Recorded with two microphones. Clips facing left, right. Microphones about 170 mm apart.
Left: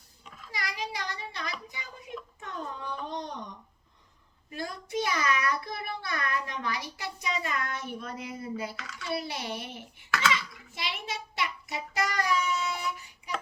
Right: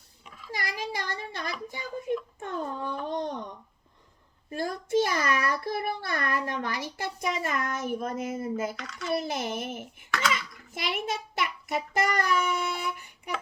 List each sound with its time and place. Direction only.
0.3 s a sound: 5° right (ahead or behind)
0.5 s a child's voice: 50° right (ahead or behind)
4.4 s a child's voice: 50° right (ahead or behind)
8.7 s a child's voice: centre (ahead or behind)
9.1 s a child's voice: 45° right (ahead or behind)
10.1 s a sound: centre (ahead or behind)
10.8 s child singing: 50° right (ahead or behind)